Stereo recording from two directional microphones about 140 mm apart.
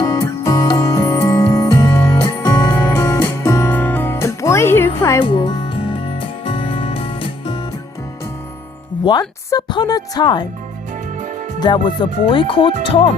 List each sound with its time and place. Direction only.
0.0 s music: 25° left (ahead or behind)
5.2 s music: 35° left (ahead or behind)
9.0 s speech: 30° left (ahead or behind)
11.6 s speech: 35° left (ahead or behind)